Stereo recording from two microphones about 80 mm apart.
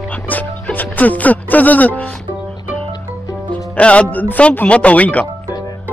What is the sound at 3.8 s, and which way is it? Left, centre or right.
Music, centre.